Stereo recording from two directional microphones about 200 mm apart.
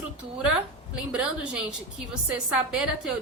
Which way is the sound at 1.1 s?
5° right (ahead or behind).